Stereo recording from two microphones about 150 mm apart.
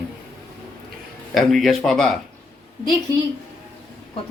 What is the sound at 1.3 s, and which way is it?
Speech, centre (ahead or behind).